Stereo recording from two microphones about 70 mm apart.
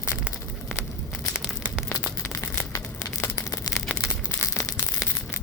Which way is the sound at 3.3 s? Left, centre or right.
Left.